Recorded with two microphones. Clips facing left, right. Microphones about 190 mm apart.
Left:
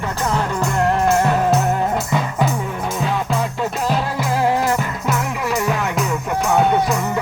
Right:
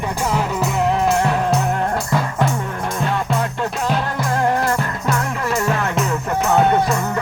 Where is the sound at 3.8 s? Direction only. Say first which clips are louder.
Even; 5° left (ahead or behind).